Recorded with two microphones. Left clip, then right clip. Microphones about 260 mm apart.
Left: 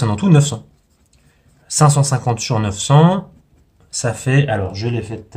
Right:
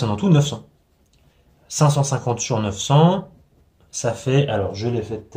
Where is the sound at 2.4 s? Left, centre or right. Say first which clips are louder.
Left 3 dB; left.